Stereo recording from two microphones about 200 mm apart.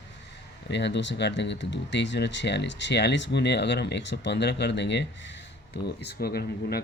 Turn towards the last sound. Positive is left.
turn(degrees=50)  # may be behind; listen again after turning